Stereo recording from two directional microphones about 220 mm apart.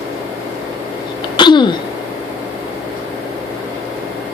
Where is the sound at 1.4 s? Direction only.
20° left (ahead or behind).